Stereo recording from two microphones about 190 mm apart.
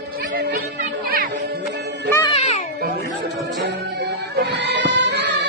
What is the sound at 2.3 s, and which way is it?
Music, 30° left (ahead or behind).